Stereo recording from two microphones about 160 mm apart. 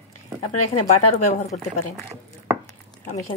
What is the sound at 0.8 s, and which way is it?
A woman's voice, 45° left (ahead or behind).